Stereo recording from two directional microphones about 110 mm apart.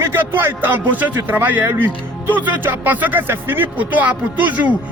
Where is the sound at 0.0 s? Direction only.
20° right (ahead or behind).